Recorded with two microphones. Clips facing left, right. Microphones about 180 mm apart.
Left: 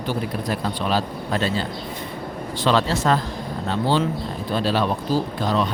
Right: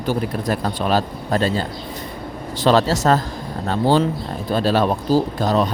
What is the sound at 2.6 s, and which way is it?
Speech, 40° right (ahead or behind).